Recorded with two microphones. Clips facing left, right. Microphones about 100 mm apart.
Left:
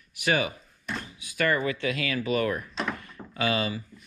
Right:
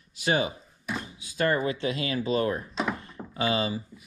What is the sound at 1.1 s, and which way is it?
Speech, 25° right (ahead or behind).